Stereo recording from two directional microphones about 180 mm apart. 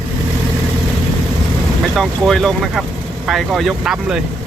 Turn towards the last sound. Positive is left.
turn(degrees=-5)  # may be behind; listen again after turning